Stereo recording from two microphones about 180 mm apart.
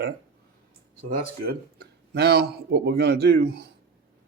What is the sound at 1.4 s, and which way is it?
A man's voice, 65° right (ahead or behind).